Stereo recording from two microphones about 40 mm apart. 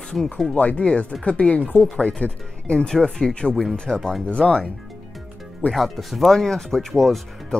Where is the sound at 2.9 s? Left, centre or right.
Centre.